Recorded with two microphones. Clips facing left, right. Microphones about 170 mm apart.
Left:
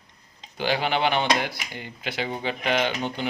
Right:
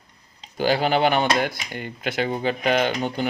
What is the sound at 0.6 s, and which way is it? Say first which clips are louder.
Speech: right 4 dB; 40° right (ahead or behind).